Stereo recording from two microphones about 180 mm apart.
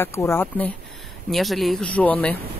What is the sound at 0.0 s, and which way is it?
Speech, 15° left (ahead or behind).